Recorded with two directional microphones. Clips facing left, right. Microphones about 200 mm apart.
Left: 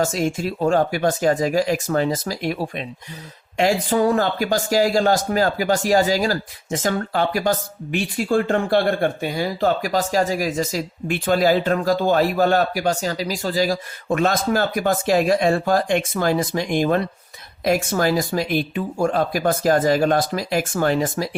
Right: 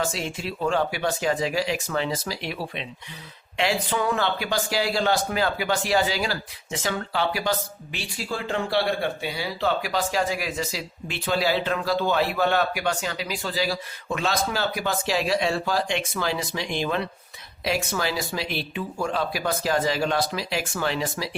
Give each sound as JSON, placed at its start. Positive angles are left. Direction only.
{"t": 0.0, "sound": "speech", "side_deg": 45}